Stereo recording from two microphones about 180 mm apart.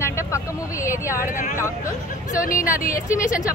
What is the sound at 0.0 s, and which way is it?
Vehicle, 15° left (ahead or behind).